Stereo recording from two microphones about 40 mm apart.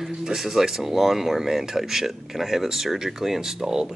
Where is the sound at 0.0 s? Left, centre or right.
Centre.